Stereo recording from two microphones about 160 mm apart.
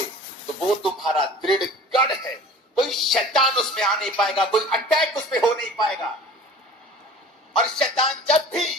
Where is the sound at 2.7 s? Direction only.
Centre (ahead or behind).